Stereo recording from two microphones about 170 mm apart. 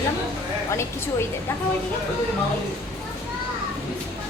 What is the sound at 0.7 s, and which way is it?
Speech, 15° left (ahead or behind).